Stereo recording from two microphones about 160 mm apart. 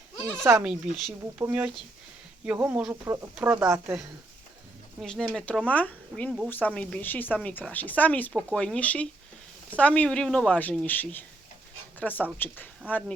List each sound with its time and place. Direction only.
0.2 s speech: 15° right (ahead or behind)
0.6 s speech: centre (ahead or behind)
4.9 s speech: centre (ahead or behind)